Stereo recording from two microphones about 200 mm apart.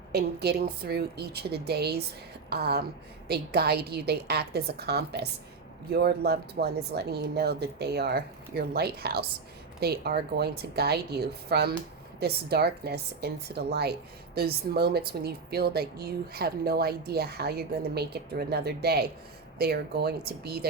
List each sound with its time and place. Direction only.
0.1 s a woman's voice: 55° right (ahead or behind)